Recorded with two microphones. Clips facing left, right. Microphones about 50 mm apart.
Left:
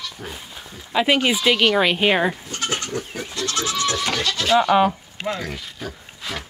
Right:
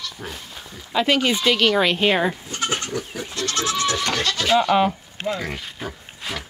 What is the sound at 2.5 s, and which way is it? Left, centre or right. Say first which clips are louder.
Goat: right 1 dB; centre.